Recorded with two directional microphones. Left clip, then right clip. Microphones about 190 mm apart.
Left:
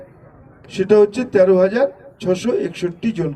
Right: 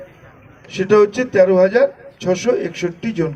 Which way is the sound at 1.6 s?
50° left (ahead or behind).